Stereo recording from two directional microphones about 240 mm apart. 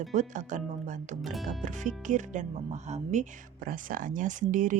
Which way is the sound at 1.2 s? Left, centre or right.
Centre.